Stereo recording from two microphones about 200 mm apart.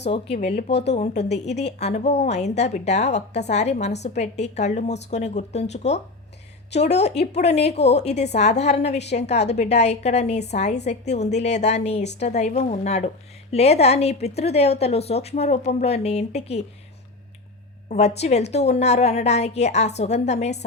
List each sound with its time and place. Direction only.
0.7 s a woman's voice: 60° left (ahead or behind)
0.9 s a woman's voice: 35° left (ahead or behind)
1.2 s a woman's voice: 55° left (ahead or behind)
1.8 s a woman's voice: 35° left (ahead or behind)
17.8 s a woman's voice: 35° left (ahead or behind)